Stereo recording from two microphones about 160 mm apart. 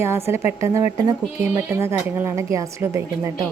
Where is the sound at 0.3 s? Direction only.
15° right (ahead or behind).